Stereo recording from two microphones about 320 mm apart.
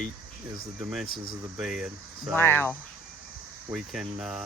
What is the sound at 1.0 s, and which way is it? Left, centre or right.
Speech, left.